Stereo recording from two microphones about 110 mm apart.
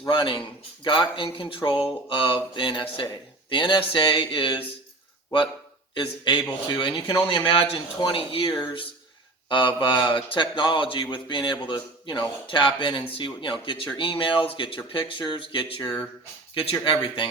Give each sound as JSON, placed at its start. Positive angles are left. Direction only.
{"t": 0.1, "sound": "a man's voice", "side_deg": 50}
{"t": 5.9, "sound": "a man's voice", "side_deg": 45}